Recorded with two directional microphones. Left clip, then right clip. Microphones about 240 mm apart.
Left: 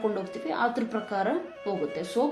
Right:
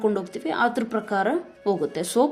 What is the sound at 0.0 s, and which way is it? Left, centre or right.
Speech, right.